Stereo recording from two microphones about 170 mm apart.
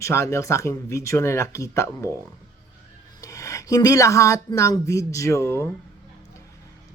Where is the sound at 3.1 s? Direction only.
20° left (ahead or behind).